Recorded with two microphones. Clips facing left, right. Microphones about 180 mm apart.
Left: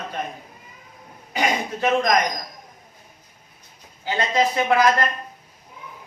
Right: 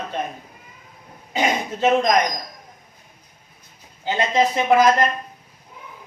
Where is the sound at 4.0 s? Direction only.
20° right (ahead or behind).